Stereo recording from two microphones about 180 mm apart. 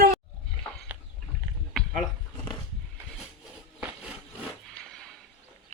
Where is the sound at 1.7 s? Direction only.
Centre (ahead or behind).